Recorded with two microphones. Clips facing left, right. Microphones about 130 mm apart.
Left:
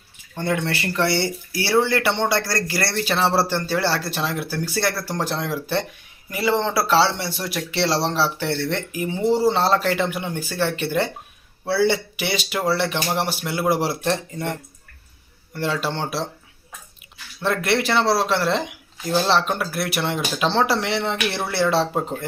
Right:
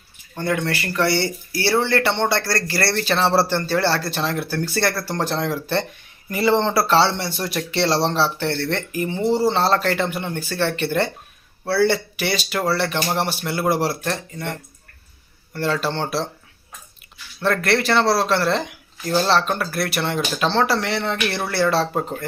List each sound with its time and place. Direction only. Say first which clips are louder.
0.3 s speech: right 1 dB; 20° left (ahead or behind)
15.5 s speech: right 2 dB; 10° left (ahead or behind)
17.4 s speech: right 1 dB; 15° left (ahead or behind)